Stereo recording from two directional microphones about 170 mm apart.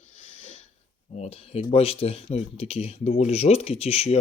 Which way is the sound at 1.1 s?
35° left (ahead or behind).